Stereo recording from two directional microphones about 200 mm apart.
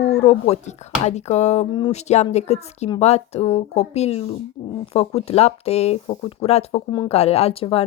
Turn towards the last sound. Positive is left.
turn(degrees=30)  # may be behind; listen again after turning